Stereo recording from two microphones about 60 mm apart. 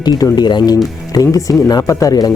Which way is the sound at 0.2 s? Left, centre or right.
Left.